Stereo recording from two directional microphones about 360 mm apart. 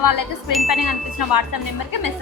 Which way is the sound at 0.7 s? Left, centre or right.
Left.